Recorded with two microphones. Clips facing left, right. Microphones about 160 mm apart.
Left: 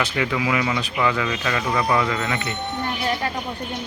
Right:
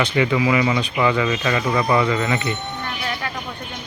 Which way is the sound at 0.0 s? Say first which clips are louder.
Right 4 dB; centre (ahead or behind).